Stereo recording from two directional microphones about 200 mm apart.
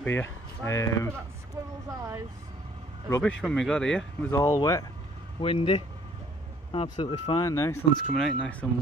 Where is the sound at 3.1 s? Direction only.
5° left (ahead or behind).